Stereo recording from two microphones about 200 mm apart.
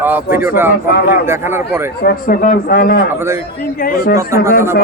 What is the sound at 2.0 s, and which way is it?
Speech, 50° left (ahead or behind).